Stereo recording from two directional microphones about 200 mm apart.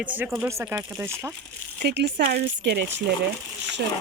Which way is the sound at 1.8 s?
60° right (ahead or behind).